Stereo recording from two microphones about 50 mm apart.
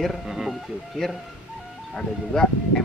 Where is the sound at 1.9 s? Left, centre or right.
Centre.